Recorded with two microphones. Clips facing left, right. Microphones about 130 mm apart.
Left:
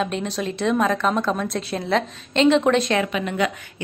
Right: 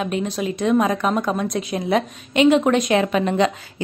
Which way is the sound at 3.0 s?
35° right (ahead or behind).